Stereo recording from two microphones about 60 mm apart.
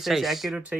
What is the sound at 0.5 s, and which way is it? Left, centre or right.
Speech, right.